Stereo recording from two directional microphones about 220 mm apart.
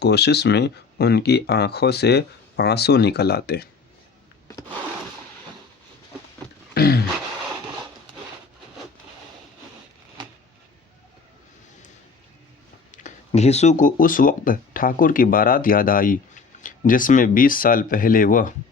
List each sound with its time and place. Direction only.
0.0 s speech: 50° left (ahead or behind)
6.7 s a sound: 45° left (ahead or behind)
12.9 s speech: 35° left (ahead or behind)